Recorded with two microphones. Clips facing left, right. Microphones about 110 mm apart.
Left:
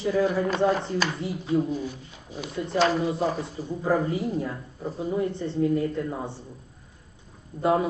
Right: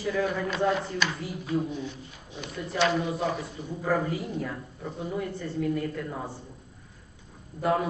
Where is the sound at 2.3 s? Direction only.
40° left (ahead or behind).